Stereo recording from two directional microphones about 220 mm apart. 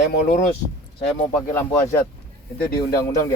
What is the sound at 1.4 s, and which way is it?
Speech, 10° left (ahead or behind).